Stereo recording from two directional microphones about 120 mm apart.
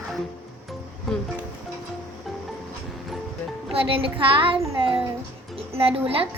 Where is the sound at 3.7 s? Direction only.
50° right (ahead or behind).